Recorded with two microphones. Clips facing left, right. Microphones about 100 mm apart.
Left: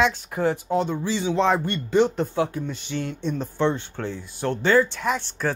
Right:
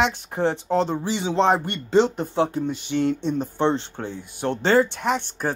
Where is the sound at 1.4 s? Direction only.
60° right (ahead or behind).